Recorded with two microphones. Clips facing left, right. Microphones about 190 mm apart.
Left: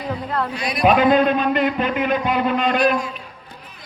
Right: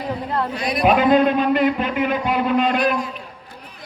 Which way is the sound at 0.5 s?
55° right (ahead or behind).